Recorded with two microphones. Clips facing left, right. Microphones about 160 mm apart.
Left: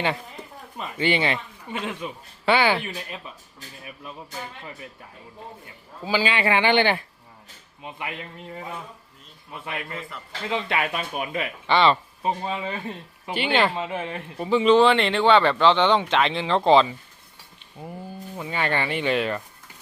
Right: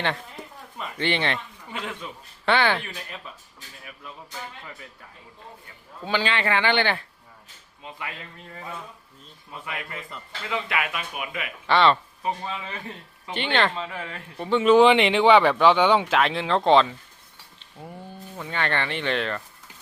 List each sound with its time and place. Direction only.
0.9 s a man's voice: 5° left (ahead or behind)
1.7 s a man's voice: 15° left (ahead or behind)
6.0 s a man's voice: 5° left (ahead or behind); by 8.1 s 20° left (ahead or behind)
9.6 s speech: 30° left (ahead or behind)
11.6 s speech: centre (ahead or behind)
12.2 s speech: 25° left (ahead or behind)
13.3 s a man's voice: 10° left (ahead or behind)
13.7 s speech: 20° left (ahead or behind)
14.3 s speech: 5° left (ahead or behind)
14.8 s a man's voice: 15° right (ahead or behind); by 19.4 s 10° left (ahead or behind)